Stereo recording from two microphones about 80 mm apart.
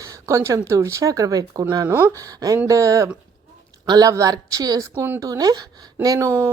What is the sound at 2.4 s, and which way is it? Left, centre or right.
Speech, right.